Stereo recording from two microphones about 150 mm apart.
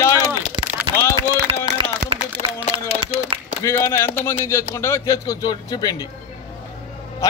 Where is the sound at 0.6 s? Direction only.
30° right (ahead or behind).